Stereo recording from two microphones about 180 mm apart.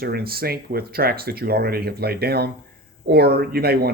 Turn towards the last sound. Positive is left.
turn(degrees=-60)  # may be behind; listen again after turning